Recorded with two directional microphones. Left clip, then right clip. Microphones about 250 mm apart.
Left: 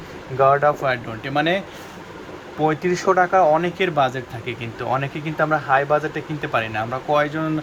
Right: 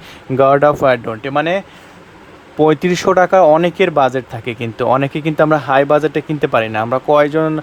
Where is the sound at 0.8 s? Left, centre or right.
Right.